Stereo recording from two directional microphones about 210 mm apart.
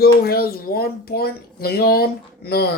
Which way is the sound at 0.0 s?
45° left (ahead or behind).